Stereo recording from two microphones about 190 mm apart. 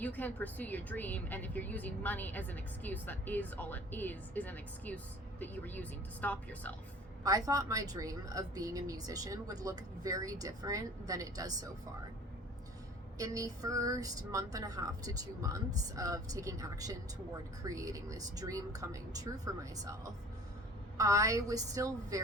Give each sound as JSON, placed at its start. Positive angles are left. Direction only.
{"t": 0.0, "sound": "speech", "side_deg": 10}
{"t": 7.3, "sound": "speech", "side_deg": -20}
{"t": 13.1, "sound": "speech", "side_deg": -20}
{"t": 21.0, "sound": "speech", "side_deg": -15}